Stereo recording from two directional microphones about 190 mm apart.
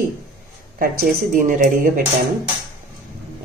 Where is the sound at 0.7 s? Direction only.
45° right (ahead or behind).